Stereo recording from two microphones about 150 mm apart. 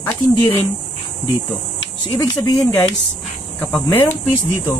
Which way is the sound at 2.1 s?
15° left (ahead or behind).